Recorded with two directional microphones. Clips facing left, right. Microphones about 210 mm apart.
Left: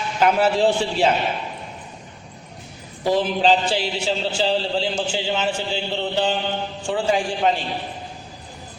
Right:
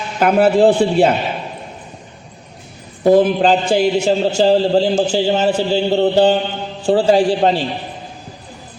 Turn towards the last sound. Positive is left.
turn(degrees=-35)  # may be behind; listen again after turning